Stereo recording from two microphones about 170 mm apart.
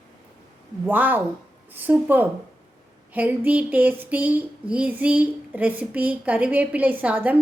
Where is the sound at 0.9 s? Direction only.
10° right (ahead or behind).